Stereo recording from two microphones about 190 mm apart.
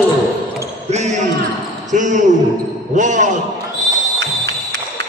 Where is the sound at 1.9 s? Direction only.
40° right (ahead or behind).